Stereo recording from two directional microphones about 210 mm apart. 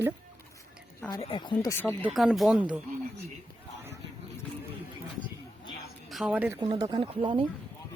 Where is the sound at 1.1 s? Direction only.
25° left (ahead or behind); by 2.6 s centre (ahead or behind).